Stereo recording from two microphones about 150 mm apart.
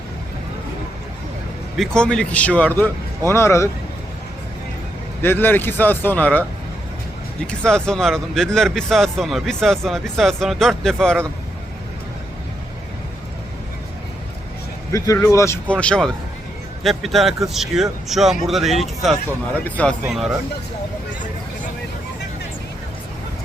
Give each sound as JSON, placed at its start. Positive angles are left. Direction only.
{"t": 1.7, "sound": "speech", "side_deg": 5}
{"t": 5.2, "sound": "speech", "side_deg": 15}
{"t": 7.4, "sound": "speech", "side_deg": 5}
{"t": 14.9, "sound": "speech", "side_deg": 20}
{"t": 15.7, "sound": "speech", "side_deg": 10}